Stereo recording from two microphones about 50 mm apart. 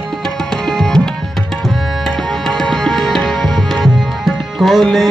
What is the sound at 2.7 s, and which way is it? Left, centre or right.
Music, centre.